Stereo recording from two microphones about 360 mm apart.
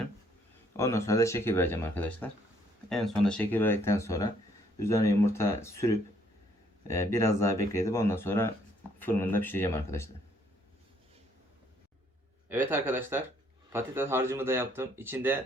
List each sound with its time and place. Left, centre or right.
0.8 s speech: centre
12.5 s speech: centre